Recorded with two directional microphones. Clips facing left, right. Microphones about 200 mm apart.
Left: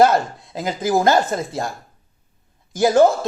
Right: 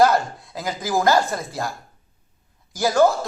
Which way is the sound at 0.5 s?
20° left (ahead or behind).